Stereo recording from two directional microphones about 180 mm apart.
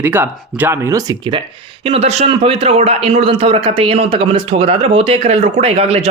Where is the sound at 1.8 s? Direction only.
35° right (ahead or behind).